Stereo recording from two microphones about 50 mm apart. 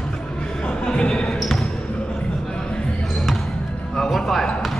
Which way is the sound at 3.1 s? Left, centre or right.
Centre.